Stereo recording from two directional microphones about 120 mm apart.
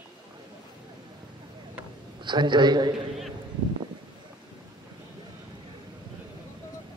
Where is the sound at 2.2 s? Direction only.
40° right (ahead or behind).